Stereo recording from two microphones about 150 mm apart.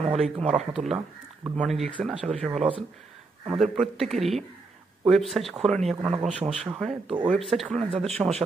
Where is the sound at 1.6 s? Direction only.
5° left (ahead or behind).